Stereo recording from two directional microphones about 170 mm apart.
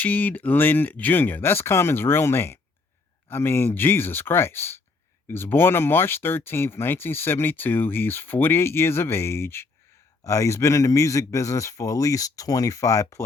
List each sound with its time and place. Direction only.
0.0 s a man's voice: 10° left (ahead or behind)